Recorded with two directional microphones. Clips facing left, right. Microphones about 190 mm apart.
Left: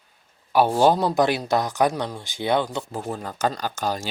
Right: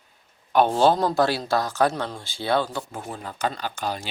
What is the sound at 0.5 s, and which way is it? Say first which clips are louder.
Speech: left 1 dB; 10° left (ahead or behind).